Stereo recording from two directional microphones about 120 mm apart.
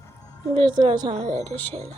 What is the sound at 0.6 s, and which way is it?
Speech, 40° right (ahead or behind).